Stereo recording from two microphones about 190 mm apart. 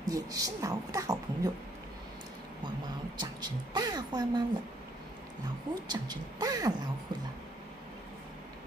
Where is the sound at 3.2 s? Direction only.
20° right (ahead or behind).